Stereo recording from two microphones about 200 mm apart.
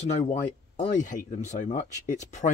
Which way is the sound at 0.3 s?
40° left (ahead or behind).